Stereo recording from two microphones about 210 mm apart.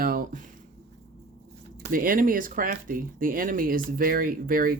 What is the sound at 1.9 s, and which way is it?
Speech, 40° right (ahead or behind).